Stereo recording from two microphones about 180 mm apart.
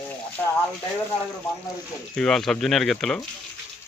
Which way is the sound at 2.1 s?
5° left (ahead or behind).